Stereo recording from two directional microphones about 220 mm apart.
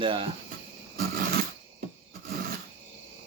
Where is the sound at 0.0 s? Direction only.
25° right (ahead or behind).